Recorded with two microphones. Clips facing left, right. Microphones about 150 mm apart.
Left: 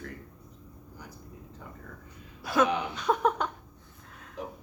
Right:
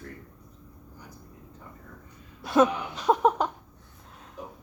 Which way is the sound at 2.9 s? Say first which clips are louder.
Right 6 dB; 30° right (ahead or behind).